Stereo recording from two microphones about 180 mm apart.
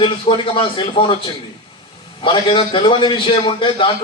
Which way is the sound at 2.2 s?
30° left (ahead or behind).